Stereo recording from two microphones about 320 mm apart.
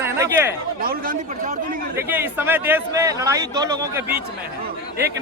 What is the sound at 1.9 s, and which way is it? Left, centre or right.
Speech, centre.